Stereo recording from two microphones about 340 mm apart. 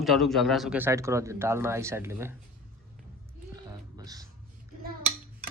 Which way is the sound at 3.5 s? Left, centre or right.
Centre.